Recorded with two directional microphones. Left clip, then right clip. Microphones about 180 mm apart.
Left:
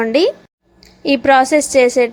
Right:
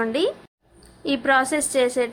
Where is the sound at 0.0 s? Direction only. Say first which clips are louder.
Left 9 dB; 30° left (ahead or behind).